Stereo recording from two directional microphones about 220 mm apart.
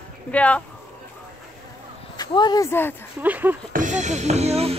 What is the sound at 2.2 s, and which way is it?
Speech, 20° left (ahead or behind).